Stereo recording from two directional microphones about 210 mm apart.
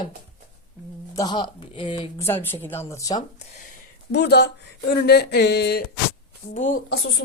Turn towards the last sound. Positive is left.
turn(degrees=50)  # may be behind; listen again after turning